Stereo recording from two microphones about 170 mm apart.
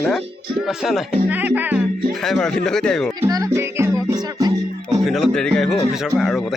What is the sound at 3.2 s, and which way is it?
Music, 20° right (ahead or behind).